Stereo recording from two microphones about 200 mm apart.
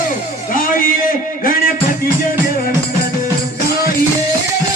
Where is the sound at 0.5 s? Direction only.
45° left (ahead or behind).